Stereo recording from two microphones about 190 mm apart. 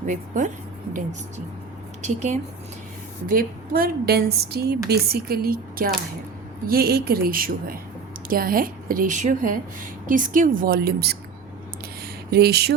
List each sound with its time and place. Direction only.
0.0 s speech: 40° right (ahead or behind)
2.0 s speech: 40° right (ahead or behind)
3.2 s speech: 50° right (ahead or behind)
12.3 s speech: 55° right (ahead or behind)